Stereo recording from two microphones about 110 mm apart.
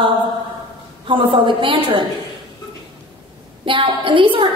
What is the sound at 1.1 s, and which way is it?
Speech, 50° right (ahead or behind).